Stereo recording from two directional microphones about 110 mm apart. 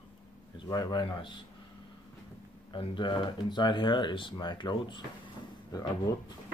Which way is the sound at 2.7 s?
45° left (ahead or behind).